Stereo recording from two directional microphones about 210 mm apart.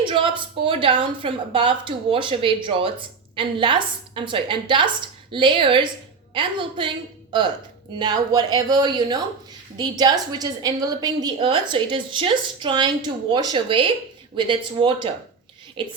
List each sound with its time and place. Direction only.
0.0 s a woman's voice: 25° right (ahead or behind)